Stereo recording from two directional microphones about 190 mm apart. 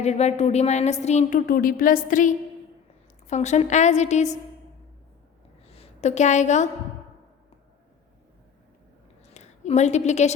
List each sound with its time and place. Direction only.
0.0 s a woman's voice: 35° left (ahead or behind)
5.7 s a woman's voice: 35° left (ahead or behind)
9.3 s a woman's voice: 35° left (ahead or behind)